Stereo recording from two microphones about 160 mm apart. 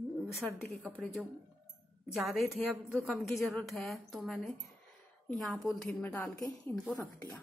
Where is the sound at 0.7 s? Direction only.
5° left (ahead or behind).